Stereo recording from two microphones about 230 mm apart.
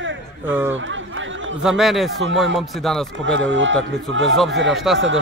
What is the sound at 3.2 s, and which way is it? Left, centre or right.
Speech, right.